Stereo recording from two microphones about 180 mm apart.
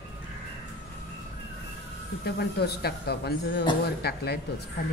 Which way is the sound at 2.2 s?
60° left (ahead or behind).